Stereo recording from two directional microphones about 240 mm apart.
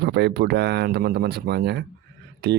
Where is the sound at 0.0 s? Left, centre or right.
Right.